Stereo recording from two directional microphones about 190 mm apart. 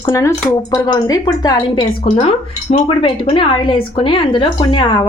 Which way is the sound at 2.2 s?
30° left (ahead or behind).